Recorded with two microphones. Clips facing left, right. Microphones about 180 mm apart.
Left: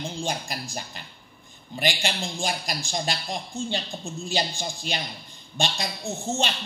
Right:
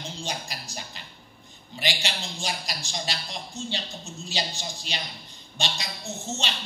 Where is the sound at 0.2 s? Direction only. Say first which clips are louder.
Left 4 dB; 50° left (ahead or behind).